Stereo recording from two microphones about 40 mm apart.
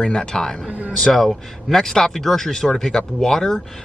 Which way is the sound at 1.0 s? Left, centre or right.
Centre.